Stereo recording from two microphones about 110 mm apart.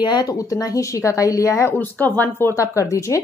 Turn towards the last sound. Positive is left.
turn(degrees=30)  # may be behind; listen again after turning